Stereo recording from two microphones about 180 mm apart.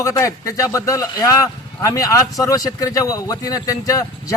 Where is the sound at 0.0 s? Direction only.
20° left (ahead or behind).